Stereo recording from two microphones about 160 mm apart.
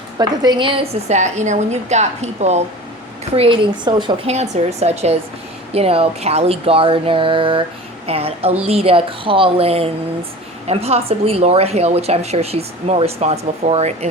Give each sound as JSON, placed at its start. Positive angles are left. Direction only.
{"t": 0.2, "sound": "a woman's voice", "side_deg": -25}
{"t": 4.5, "sound": "a woman's voice", "side_deg": -40}